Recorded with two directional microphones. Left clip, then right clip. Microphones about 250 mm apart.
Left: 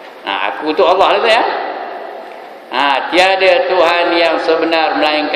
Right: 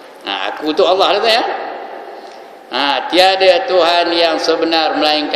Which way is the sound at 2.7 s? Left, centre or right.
Right.